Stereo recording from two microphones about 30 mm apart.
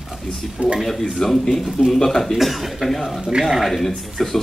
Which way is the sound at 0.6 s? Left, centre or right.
Right.